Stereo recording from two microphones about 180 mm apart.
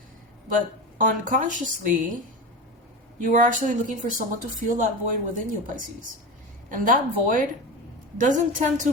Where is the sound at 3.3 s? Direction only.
45° right (ahead or behind).